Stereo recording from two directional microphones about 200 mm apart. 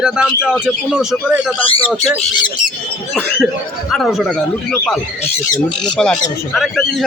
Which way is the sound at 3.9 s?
Centre (ahead or behind).